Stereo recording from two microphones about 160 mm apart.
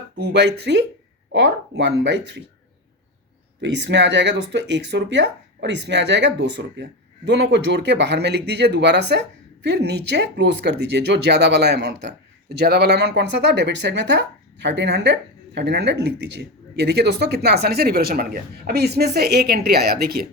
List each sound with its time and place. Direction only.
0.2 s speech: 90° right
3.6 s speech: 90° right; by 20.2 s 75° right (ahead or behind)